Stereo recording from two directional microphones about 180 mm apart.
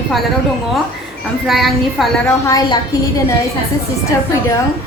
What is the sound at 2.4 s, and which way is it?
Speech, 20° left (ahead or behind).